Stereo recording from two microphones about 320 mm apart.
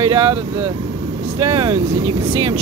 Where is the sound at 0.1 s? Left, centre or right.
Centre.